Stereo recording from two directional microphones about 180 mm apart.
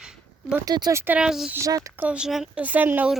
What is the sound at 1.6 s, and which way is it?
Speech, 20° right (ahead or behind).